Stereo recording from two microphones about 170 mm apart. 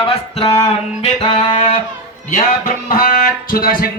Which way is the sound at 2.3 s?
50° left (ahead or behind).